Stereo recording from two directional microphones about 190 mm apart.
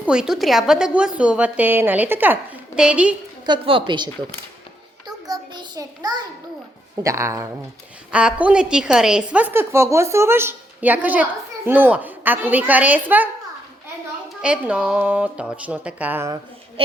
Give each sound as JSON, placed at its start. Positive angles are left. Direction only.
{"t": 0.0, "sound": "a woman's voice", "side_deg": -5}
{"t": 3.4, "sound": "a woman's voice", "side_deg": -25}
{"t": 5.0, "sound": "a sound", "side_deg": -20}
{"t": 7.0, "sound": "a woman's voice", "side_deg": -15}
{"t": 14.4, "sound": "a woman's voice", "side_deg": -5}